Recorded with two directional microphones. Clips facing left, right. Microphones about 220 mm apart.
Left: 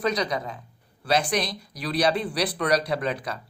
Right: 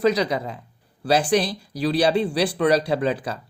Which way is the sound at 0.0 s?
25° right (ahead or behind).